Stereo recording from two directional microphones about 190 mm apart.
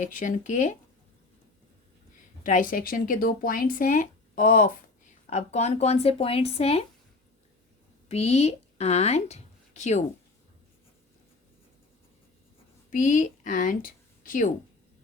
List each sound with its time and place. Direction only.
0.0 s speech: 40° left (ahead or behind)
2.4 s speech: 45° left (ahead or behind)
8.0 s speech: 35° left (ahead or behind)
12.9 s speech: 40° left (ahead or behind)